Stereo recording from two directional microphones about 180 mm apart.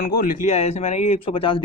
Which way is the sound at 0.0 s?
50° left (ahead or behind).